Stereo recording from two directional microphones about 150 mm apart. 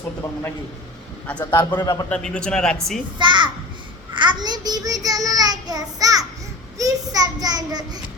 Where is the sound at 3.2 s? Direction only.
30° right (ahead or behind).